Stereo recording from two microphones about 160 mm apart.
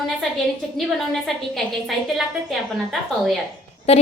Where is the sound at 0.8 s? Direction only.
Centre (ahead or behind).